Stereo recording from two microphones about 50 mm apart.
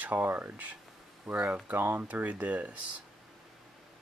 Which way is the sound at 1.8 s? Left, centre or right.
Right.